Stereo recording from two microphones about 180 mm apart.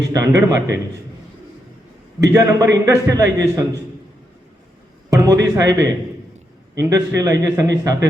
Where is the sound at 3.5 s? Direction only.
15° right (ahead or behind).